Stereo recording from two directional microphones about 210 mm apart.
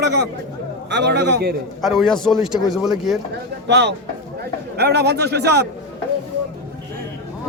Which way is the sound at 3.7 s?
55° right (ahead or behind).